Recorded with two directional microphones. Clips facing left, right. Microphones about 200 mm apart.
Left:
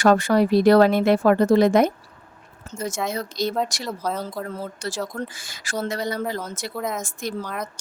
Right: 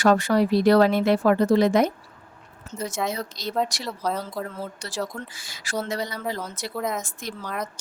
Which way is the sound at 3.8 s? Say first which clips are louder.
Left 1 dB; centre (ahead or behind).